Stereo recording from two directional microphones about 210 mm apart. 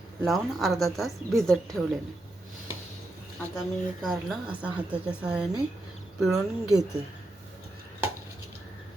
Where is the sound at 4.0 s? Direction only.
Centre (ahead or behind).